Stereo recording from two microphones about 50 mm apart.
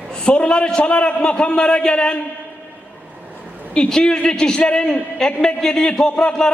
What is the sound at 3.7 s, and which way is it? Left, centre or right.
A man's voice, centre.